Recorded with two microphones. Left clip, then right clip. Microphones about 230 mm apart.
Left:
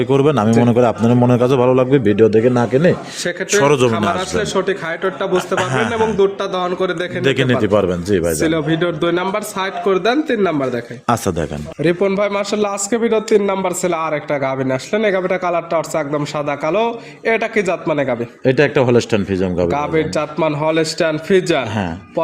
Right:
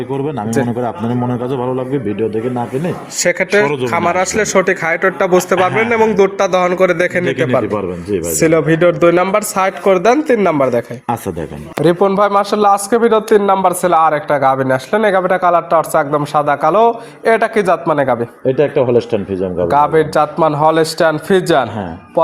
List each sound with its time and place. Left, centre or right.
0.1 s a man's voice: left
3.2 s a man's voice: right
7.6 s speech: left
8.4 s speech: right
11.8 s a man's voice: centre
18.4 s speech: left
19.7 s a man's voice: centre